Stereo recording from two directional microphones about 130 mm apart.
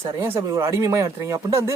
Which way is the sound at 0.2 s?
20° right (ahead or behind).